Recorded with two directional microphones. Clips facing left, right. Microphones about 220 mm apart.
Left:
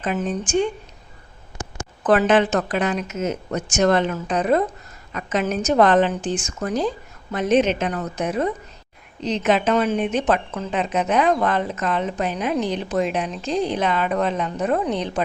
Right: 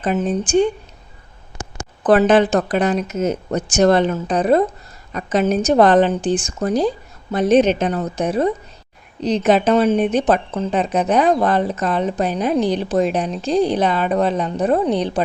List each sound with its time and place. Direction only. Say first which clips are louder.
2.0 s a woman's voice: right 4 dB; 35° right (ahead or behind)